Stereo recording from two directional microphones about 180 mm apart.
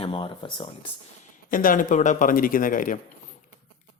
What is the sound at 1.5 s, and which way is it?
Speech, 50° left (ahead or behind).